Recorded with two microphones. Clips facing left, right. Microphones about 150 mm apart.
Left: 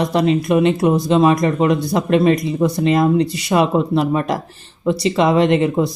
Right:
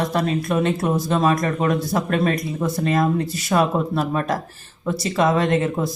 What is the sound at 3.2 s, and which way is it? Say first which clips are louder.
Speech: left 2 dB; 70° left (ahead or behind).